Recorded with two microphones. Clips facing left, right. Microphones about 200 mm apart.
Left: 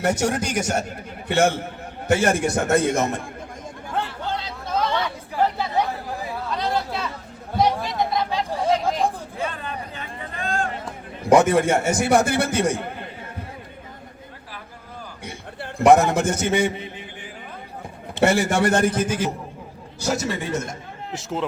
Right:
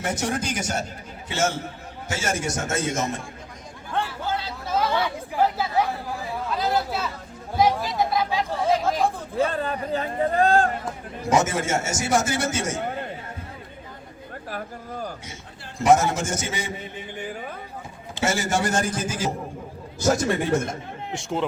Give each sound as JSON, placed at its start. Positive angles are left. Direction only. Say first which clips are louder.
{"t": 0.0, "sound": "a man's voice", "louder": "left 5 dB", "side_deg": 65}
{"t": 4.0, "sound": "chatter", "louder": "even", "side_deg": -5}
{"t": 9.5, "sound": "speech", "louder": "right 7 dB", "side_deg": -35}
{"t": 11.3, "sound": "a man's voice", "louder": "left 6 dB", "side_deg": 60}
{"t": 15.8, "sound": "a man's voice", "louder": "left 4 dB", "side_deg": 60}
{"t": 18.2, "sound": "a man's voice", "louder": "left 5 dB", "side_deg": 60}
{"t": 21.1, "sound": "speech", "louder": "even", "side_deg": 0}